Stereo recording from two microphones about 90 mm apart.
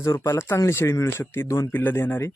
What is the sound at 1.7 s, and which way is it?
Speech, 25° left (ahead or behind).